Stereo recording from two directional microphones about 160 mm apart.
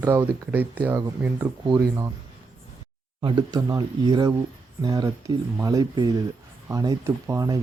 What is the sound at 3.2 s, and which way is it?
Speech, 25° right (ahead or behind).